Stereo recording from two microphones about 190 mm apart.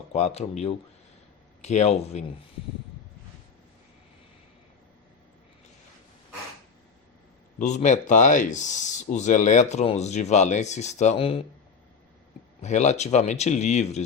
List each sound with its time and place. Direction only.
0.1 s speech: 35° left (ahead or behind)
7.6 s speech: 40° left (ahead or behind)
12.6 s speech: 35° left (ahead or behind)